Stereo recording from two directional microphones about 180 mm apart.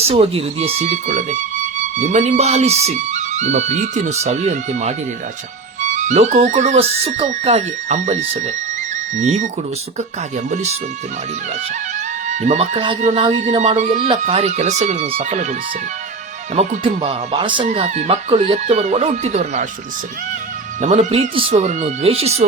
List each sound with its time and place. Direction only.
0.0 s speech: 30° right (ahead or behind)
12.3 s a man's voice: 40° right (ahead or behind)
12.7 s speech: 25° right (ahead or behind)
13.0 s speech: 40° right (ahead or behind)
16.6 s speech: 30° right (ahead or behind)
21.0 s speech: 35° right (ahead or behind)